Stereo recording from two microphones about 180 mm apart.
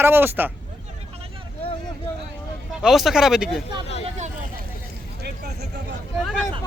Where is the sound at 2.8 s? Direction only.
Centre (ahead or behind).